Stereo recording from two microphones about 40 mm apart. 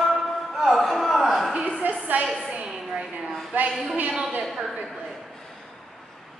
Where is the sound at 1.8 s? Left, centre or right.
Right.